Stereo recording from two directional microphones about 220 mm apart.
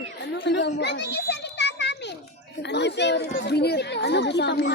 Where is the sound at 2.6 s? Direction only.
50° left (ahead or behind).